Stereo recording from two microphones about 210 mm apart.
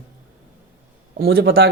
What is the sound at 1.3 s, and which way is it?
Speech, 70° right (ahead or behind).